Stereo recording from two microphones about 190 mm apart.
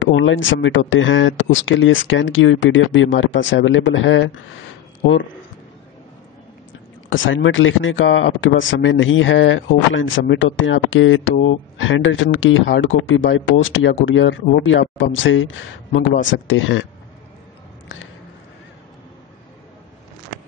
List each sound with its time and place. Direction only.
0.0 s speech: 90° left
7.1 s speech: 85° left